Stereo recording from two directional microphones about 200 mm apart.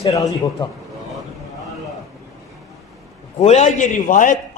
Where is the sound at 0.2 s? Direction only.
20° left (ahead or behind).